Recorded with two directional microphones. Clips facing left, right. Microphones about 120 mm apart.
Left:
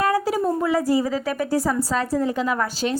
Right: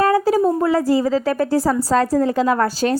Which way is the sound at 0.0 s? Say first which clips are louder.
Right 5 dB; 30° right (ahead or behind).